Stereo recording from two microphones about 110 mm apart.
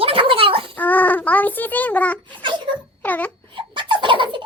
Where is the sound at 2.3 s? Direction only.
50° right (ahead or behind).